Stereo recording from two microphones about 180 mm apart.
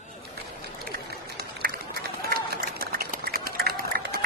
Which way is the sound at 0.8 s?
60° right (ahead or behind).